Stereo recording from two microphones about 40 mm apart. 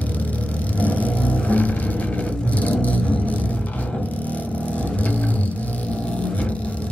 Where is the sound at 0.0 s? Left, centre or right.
Left.